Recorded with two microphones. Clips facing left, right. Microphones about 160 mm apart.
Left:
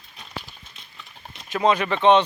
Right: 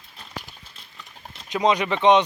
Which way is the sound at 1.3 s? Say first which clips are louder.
Even; 20° right (ahead or behind).